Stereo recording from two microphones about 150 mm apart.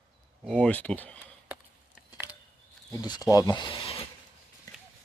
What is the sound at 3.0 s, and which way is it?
Speech, 25° left (ahead or behind).